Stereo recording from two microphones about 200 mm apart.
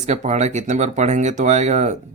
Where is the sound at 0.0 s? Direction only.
35° right (ahead or behind).